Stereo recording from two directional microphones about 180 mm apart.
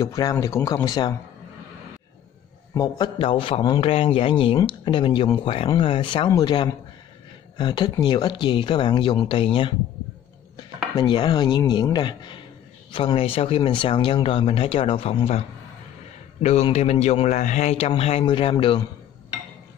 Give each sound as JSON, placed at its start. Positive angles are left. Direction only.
{"t": 0.0, "sound": "speech", "side_deg": 20}
{"t": 2.7, "sound": "speech", "side_deg": 20}
{"t": 11.0, "sound": "speech", "side_deg": 25}
{"t": 16.4, "sound": "speech", "side_deg": 35}